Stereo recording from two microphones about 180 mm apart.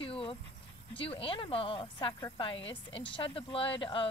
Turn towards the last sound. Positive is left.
turn(degrees=30)  # may be behind; listen again after turning